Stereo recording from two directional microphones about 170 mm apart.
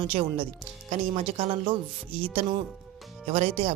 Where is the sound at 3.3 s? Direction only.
35° right (ahead or behind).